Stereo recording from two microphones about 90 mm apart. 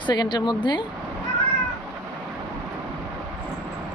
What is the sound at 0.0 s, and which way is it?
Speech, 55° left (ahead or behind).